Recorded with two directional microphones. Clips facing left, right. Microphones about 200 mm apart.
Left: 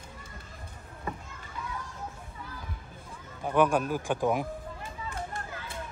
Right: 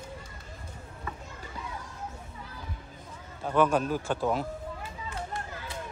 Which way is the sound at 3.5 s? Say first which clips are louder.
Even; 10° left (ahead or behind).